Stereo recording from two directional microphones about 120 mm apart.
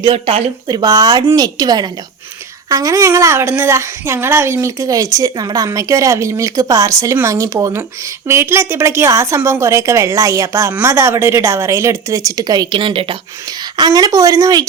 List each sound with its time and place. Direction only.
0.1 s speech: 55° right (ahead or behind)
0.7 s a woman's voice: 30° right (ahead or behind)
12.8 s speech: 50° right (ahead or behind)
13.7 s speech: 35° right (ahead or behind)